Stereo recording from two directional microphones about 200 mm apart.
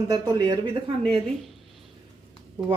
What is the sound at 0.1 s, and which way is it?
Speech, 20° right (ahead or behind).